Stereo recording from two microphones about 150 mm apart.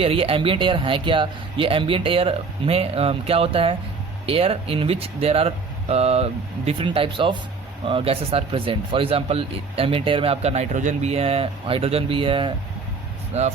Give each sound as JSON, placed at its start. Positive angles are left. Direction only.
{"t": 0.0, "sound": "speech", "side_deg": -40}
{"t": 13.3, "sound": "speech", "side_deg": -45}